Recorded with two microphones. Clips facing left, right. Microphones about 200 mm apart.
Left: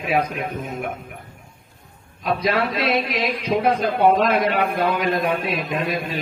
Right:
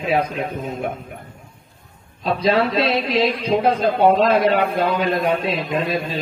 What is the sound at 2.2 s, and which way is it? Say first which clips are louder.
Speech: right 3 dB; 30° right (ahead or behind).